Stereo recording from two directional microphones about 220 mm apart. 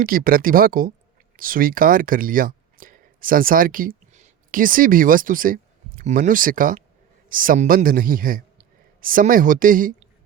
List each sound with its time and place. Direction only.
0.0 s a man's voice: 40° right (ahead or behind)